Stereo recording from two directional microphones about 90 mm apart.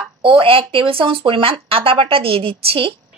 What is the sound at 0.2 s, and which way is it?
Speech, 85° right.